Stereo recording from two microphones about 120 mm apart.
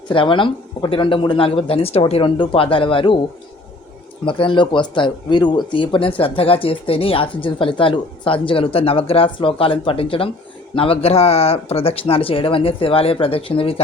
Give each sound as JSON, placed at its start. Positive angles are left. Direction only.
{"t": 0.1, "sound": "speech", "side_deg": 45}
{"t": 4.3, "sound": "speech", "side_deg": 45}